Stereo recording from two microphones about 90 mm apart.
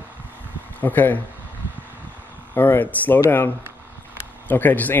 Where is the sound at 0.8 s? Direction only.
20° left (ahead or behind).